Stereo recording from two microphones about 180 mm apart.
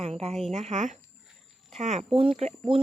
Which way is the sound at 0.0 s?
35° right (ahead or behind).